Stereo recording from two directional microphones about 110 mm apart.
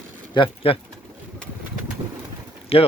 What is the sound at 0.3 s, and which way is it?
Speech, 55° left (ahead or behind).